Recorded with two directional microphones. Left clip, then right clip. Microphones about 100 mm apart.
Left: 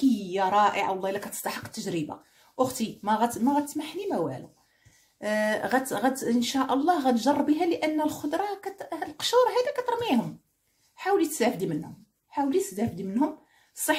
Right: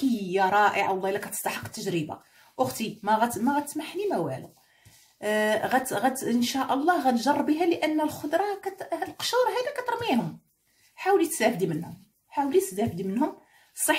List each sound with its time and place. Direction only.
0.3 s speech: 30° left (ahead or behind)